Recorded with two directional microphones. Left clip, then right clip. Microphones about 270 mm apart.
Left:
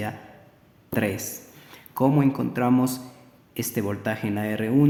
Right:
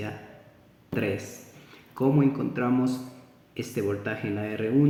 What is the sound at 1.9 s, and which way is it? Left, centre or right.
Speech, left.